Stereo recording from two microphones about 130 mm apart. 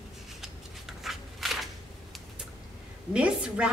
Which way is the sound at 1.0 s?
Centre (ahead or behind).